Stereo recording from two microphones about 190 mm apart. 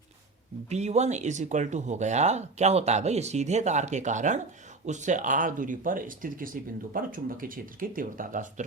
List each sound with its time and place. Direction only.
0.7 s speech: 35° right (ahead or behind)